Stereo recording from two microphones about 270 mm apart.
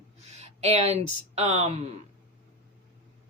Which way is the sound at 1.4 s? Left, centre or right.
Right.